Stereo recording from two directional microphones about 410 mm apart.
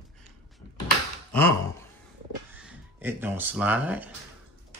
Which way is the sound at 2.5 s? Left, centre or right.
Centre.